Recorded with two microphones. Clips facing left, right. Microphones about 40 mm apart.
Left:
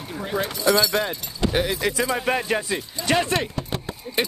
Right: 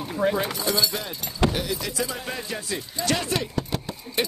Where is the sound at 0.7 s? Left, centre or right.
Left.